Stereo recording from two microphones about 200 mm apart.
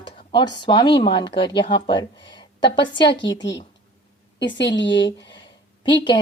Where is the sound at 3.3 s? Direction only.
65° left (ahead or behind).